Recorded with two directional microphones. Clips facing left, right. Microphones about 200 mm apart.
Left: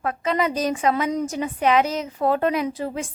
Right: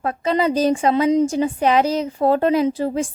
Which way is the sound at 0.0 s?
30° right (ahead or behind).